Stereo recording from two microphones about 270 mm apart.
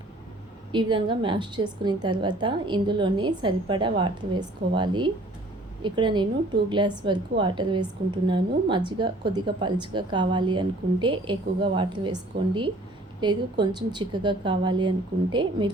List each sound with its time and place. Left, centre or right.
0.7 s a woman's voice: centre